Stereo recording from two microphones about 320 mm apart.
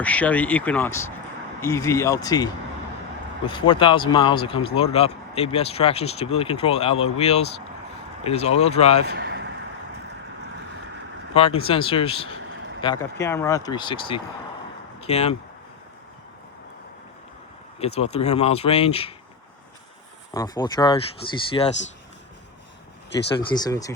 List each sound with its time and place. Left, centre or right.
0.0 s speech: centre
9.0 s a sound: right
11.3 s speech: centre
12.4 s vehicle: right
12.8 s speech: centre
17.7 s speech: centre
20.3 s speech: centre
23.5 s speech: centre